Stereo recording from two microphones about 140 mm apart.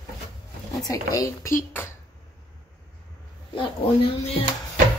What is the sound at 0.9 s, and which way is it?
Speech, 25° left (ahead or behind).